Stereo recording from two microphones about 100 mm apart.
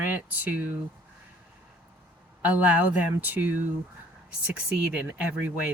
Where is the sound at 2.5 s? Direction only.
15° right (ahead or behind).